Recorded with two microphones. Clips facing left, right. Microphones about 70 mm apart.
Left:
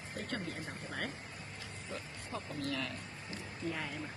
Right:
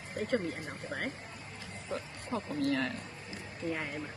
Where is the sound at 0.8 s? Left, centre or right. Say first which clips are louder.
Right 4 dB; centre.